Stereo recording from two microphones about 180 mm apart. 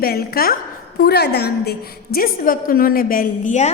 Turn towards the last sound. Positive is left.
turn(degrees=45)  # may be behind; listen again after turning